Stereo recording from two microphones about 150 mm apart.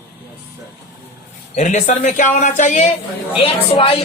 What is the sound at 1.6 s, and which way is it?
Speech, 55° left (ahead or behind).